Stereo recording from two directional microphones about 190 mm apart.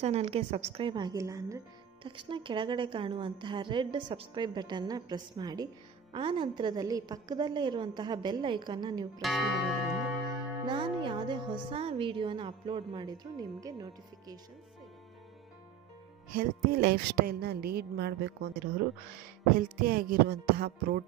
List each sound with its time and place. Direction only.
0.0 s a woman's voice: 35° right (ahead or behind)
9.2 s speech: centre (ahead or behind)
10.6 s speech: 25° right (ahead or behind)
16.3 s speech: 50° right (ahead or behind)
19.1 s music: 50° right (ahead or behind)